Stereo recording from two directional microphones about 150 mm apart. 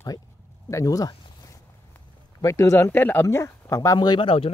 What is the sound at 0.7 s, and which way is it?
Speech, 20° left (ahead or behind).